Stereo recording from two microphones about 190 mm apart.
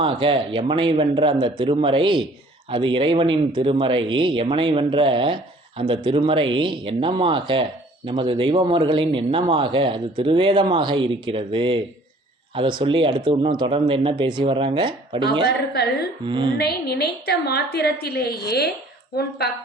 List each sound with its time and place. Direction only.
0.0 s speech: 25° right (ahead or behind)
12.8 s speech: 25° right (ahead or behind)
15.7 s a woman's voice: 60° left (ahead or behind)
16.2 s speech: 25° right (ahead or behind)
16.6 s a woman's voice: 60° left (ahead or behind)